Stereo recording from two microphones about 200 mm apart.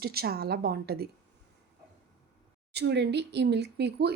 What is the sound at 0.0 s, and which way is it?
A woman's voice, 50° right (ahead or behind).